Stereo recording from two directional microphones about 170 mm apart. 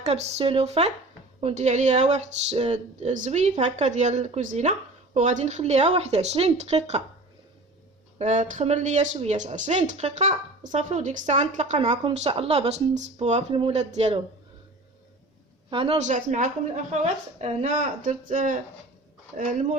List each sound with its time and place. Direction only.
0.0 s speech: 35° right (ahead or behind)
8.2 s speech: 45° right (ahead or behind)
15.7 s speech: 35° right (ahead or behind)